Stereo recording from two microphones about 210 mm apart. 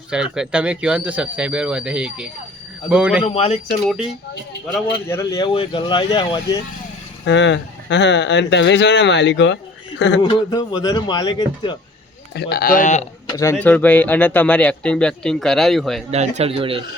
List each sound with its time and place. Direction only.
0.1 s speech: 5° right (ahead or behind)
3.2 s speech: 30° left (ahead or behind)
3.8 s speech: 5° right (ahead or behind)
5.0 s speech: 15° left (ahead or behind)
7.3 s speech: 60° left (ahead or behind)
10.2 s speech: 20° left (ahead or behind)
12.3 s speech: 50° left (ahead or behind)
13.3 s speech: 15° left (ahead or behind)
16.1 s speech: 30° right (ahead or behind)